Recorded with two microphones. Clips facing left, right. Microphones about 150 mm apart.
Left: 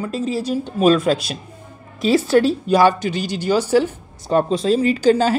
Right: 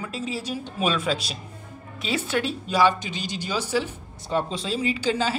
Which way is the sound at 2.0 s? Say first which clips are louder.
Left 11 dB; 40° left (ahead or behind).